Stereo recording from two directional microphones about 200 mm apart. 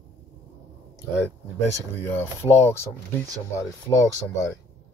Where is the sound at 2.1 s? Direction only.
10° left (ahead or behind).